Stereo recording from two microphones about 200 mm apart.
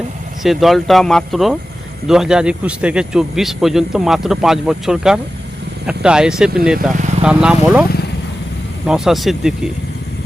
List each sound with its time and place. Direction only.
0.4 s speech: centre (ahead or behind)
7.9 s vehicle: 50° left (ahead or behind)
8.9 s speech: centre (ahead or behind)